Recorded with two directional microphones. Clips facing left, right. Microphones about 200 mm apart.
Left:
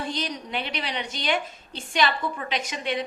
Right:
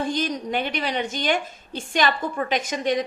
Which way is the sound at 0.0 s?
45° right (ahead or behind).